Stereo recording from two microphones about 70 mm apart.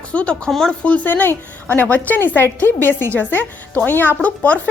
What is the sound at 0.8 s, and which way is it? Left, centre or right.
A woman's voice, left.